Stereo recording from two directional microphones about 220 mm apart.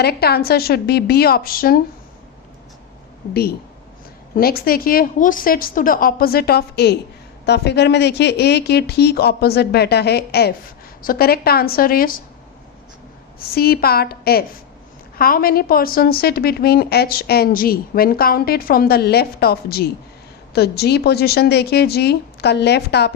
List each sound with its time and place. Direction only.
0.0 s a woman's voice: 45° left (ahead or behind)
4.4 s a woman's voice: 45° left (ahead or behind)
13.5 s a woman's voice: 45° left (ahead or behind)